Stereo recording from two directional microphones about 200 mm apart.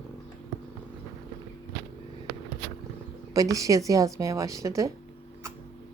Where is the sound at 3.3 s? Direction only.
15° right (ahead or behind).